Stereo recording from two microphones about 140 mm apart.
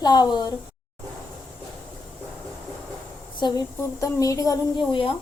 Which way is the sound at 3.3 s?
30° left (ahead or behind).